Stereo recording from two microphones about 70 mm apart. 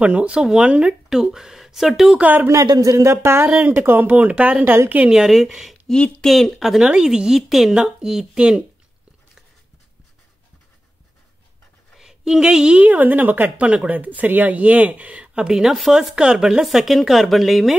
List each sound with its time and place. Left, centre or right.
0.0 s a woman's voice: centre
2.1 s speech: right
2.6 s speech: right
5.1 s a woman's voice: centre
11.9 s a woman's voice: centre